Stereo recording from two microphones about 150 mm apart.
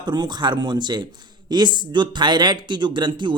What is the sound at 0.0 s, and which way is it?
A man's voice, 30° right (ahead or behind).